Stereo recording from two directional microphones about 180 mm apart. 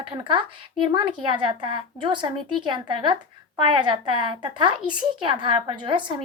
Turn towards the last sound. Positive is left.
turn(degrees=-25)  # may be behind; listen again after turning